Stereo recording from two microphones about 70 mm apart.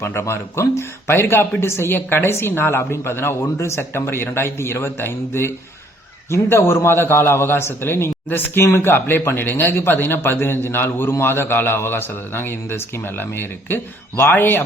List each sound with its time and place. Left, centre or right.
0.0 s speech: left